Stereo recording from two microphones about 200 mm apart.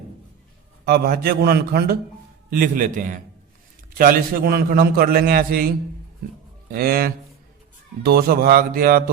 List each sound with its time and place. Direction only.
0.9 s a man's voice: 50° right (ahead or behind)
6.7 s a man's voice: 50° right (ahead or behind)